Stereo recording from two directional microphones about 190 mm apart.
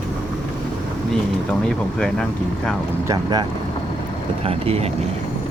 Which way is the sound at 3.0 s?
20° right (ahead or behind).